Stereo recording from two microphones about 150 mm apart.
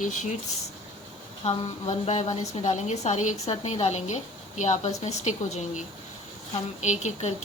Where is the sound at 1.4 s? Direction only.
45° left (ahead or behind).